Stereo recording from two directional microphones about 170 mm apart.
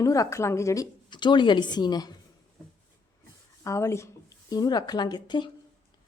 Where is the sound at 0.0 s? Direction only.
20° left (ahead or behind).